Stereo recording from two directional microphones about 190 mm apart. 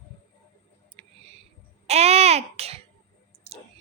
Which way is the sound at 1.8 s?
35° right (ahead or behind).